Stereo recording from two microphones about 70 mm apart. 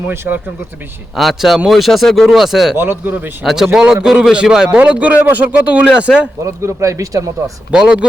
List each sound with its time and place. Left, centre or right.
1.1 s speech: centre
2.7 s speech: right
3.4 s a man's voice: centre
4.8 s speech: centre
6.6 s speech: right
7.7 s a man's voice: centre